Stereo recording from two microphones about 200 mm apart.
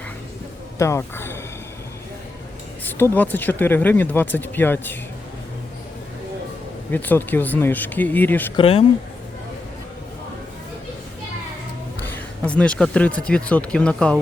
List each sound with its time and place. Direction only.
0.8 s speech: 15° left (ahead or behind)
2.8 s speech: 10° left (ahead or behind)
6.9 s speech: 10° left (ahead or behind)
8.5 s speech: 30° left (ahead or behind)
12.0 s speech: 5° left (ahead or behind)